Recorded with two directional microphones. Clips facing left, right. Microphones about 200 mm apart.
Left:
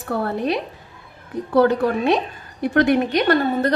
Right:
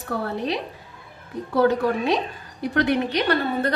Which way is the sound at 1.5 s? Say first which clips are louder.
Left 3 dB; 55° left (ahead or behind).